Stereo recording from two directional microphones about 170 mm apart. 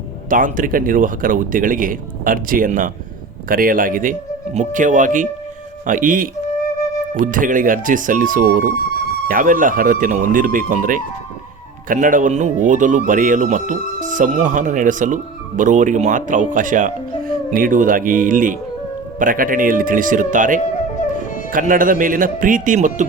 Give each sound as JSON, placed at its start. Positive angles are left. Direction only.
{"t": 0.3, "sound": "speech", "side_deg": -55}